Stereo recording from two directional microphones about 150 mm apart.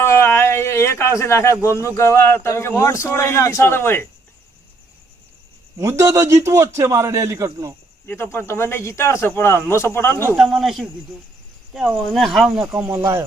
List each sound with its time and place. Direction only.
0.0 s a sound: 15° left (ahead or behind)
1.8 s speech: 20° left (ahead or behind)
5.7 s a man's voice: 20° right (ahead or behind)
8.0 s speech: 15° left (ahead or behind)
10.3 s a man's voice: centre (ahead or behind); by 13.2 s 20° right (ahead or behind)